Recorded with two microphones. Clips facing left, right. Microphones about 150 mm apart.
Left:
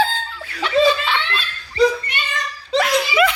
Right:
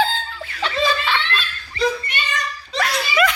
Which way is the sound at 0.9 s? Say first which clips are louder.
Left 2 dB; 20° left (ahead or behind).